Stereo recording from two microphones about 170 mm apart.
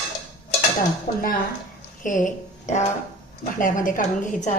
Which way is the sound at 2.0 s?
50° left (ahead or behind).